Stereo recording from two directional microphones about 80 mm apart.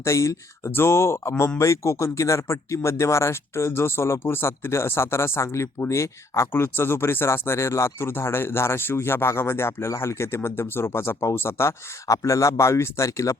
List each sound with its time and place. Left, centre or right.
0.0 s speech: left